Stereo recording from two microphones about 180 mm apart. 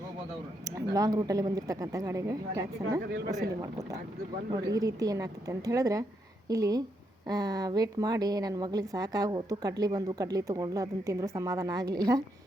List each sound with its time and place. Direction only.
0.6 s a woman's voice: 20° right (ahead or behind)
4.5 s a woman's voice: 20° right (ahead or behind)